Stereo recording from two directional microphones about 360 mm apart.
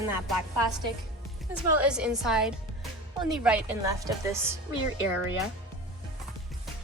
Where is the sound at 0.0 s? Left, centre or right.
Centre.